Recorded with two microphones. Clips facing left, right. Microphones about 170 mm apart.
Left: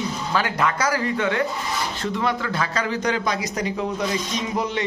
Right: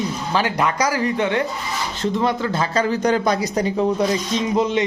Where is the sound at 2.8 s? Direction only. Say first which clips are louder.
Right 5 dB; 40° right (ahead or behind).